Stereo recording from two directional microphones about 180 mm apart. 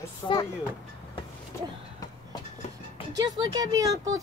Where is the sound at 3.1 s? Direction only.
20° right (ahead or behind).